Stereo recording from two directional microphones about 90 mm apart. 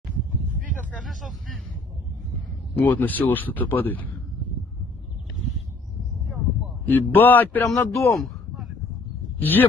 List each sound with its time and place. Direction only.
2.8 s speech: 20° left (ahead or behind)
6.9 s speech: 20° left (ahead or behind)
7.7 s speech: 30° left (ahead or behind)
8.1 s a sound: centre (ahead or behind)
9.4 s speech: 20° left (ahead or behind)